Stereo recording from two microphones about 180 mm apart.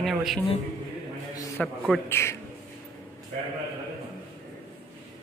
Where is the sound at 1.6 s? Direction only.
5° left (ahead or behind).